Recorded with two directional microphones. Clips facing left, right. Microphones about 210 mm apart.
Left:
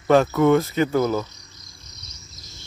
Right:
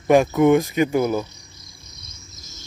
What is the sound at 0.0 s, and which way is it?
Speech, 15° right (ahead or behind).